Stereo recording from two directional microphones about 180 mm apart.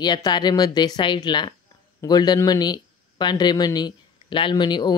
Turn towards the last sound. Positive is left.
turn(degrees=25)  # may be behind; listen again after turning